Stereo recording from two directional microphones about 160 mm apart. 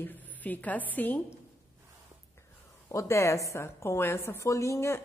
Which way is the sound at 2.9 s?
15° left (ahead or behind).